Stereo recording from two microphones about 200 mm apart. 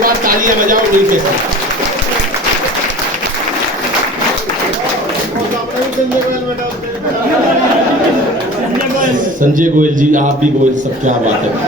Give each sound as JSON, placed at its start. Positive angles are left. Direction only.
{"t": 0.0, "sound": "speech", "side_deg": -45}
{"t": 9.0, "sound": "a man's voice", "side_deg": -40}